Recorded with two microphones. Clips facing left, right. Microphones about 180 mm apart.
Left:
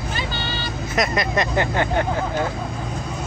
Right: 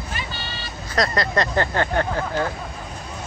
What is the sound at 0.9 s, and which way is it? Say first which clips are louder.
Speech: even; 20° left (ahead or behind).